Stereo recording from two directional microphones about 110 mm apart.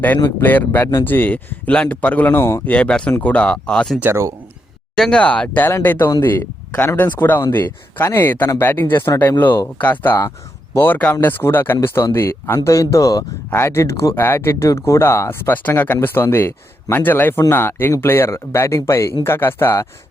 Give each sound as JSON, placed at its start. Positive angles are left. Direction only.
{"t": 0.0, "sound": "speech", "side_deg": 20}
{"t": 2.7, "sound": "speech", "side_deg": 10}
{"t": 3.1, "sound": "speech", "side_deg": 20}
{"t": 3.3, "sound": "speech", "side_deg": 10}
{"t": 4.0, "sound": "speech", "side_deg": -25}
{"t": 4.9, "sound": "speech", "side_deg": 5}